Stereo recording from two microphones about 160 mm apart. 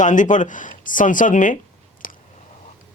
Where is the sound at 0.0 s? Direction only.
50° left (ahead or behind).